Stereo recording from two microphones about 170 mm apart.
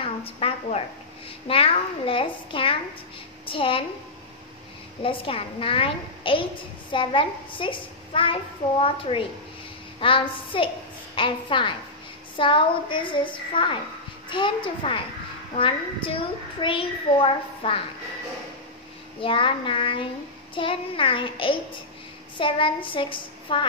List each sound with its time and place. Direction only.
0.0 s a sound: 35° left (ahead or behind)
1.5 s a child's voice: 35° left (ahead or behind)
5.0 s a child's voice: 30° left (ahead or behind)
19.2 s a child's voice: 30° left (ahead or behind)